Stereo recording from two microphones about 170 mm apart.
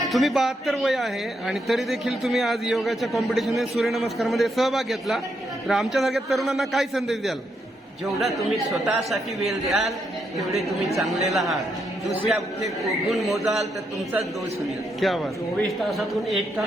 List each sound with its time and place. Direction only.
0.1 s speech: centre (ahead or behind)